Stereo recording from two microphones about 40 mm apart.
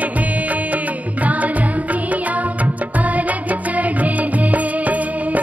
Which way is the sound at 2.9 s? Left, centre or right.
Right.